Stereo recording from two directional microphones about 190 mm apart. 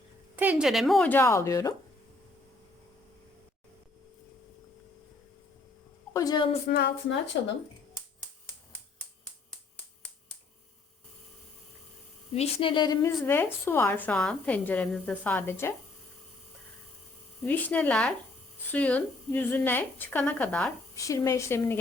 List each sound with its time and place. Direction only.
0.3 s a woman's voice: 5° right (ahead or behind); by 1.7 s 15° left (ahead or behind)
6.1 s a woman's voice: 20° left (ahead or behind)
6.7 s a woman's voice: 60° left (ahead or behind)
12.3 s a woman's voice: 35° left (ahead or behind); by 15.7 s 10° left (ahead or behind)
17.4 s a woman's voice: 10° left (ahead or behind)
20.9 s a woman's voice: 15° left (ahead or behind)